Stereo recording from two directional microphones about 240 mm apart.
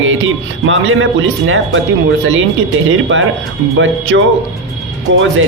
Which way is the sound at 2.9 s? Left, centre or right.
Right.